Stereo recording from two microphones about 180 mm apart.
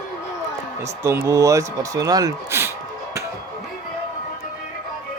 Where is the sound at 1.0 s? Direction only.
15° right (ahead or behind).